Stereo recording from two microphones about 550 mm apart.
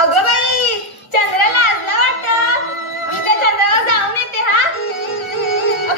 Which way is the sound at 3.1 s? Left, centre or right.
Left.